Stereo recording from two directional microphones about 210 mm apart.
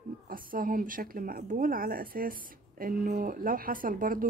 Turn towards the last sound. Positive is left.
turn(degrees=-40)  # may be behind; listen again after turning